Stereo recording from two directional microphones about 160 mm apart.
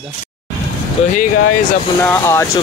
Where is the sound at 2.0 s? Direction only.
15° left (ahead or behind).